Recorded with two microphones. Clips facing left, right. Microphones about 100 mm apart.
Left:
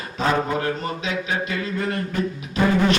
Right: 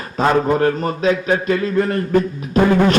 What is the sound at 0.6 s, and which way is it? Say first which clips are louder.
A man's voice: right 9 dB; 45° right (ahead or behind).